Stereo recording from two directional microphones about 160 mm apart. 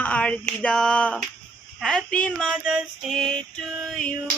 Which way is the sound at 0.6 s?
5° left (ahead or behind).